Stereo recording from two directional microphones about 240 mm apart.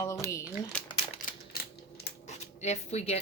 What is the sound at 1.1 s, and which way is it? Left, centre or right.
Typewriter, left.